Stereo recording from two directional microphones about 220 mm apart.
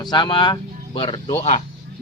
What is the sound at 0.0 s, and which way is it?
Speech, 20° left (ahead or behind).